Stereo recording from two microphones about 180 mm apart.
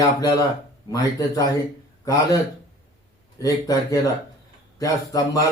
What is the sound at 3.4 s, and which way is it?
Speech, 20° left (ahead or behind).